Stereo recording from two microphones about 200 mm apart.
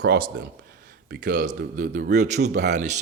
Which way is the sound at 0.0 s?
55° right (ahead or behind).